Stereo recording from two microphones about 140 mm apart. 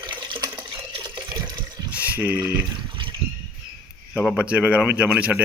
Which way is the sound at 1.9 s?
10° right (ahead or behind).